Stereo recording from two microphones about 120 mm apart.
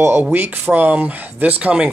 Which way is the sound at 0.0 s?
15° right (ahead or behind).